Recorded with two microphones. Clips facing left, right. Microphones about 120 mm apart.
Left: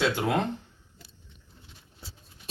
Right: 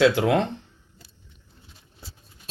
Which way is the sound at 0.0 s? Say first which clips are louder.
Right 7 dB; 90° right.